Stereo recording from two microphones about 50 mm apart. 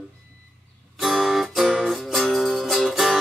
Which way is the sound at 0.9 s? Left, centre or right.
Centre.